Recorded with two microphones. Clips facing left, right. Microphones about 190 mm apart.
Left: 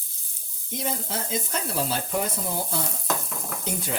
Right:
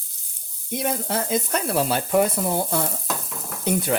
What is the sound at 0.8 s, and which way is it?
Speech, 60° right (ahead or behind).